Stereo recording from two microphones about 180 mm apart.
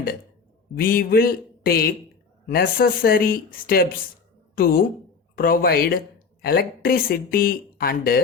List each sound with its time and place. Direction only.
0.8 s a woman's voice: 55° left (ahead or behind)